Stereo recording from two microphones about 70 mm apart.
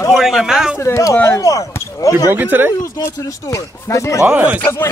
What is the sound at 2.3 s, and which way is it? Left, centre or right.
Speech, right.